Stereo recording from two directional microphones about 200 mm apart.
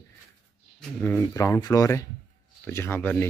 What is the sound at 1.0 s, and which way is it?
Speech, 10° left (ahead or behind).